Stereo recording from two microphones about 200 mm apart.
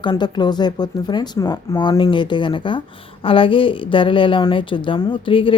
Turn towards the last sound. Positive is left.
turn(degrees=25)  # may be behind; listen again after turning